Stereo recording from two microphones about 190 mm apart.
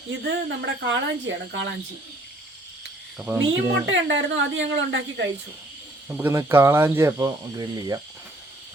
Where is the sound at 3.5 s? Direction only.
75° right (ahead or behind).